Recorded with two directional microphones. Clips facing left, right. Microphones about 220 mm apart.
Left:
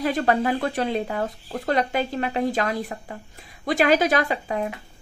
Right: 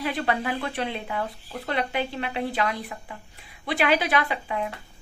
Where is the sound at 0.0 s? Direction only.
45° left (ahead or behind).